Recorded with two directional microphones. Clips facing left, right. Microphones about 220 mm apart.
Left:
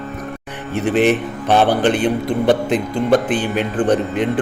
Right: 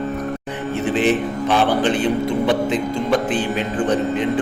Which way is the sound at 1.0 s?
60° left (ahead or behind).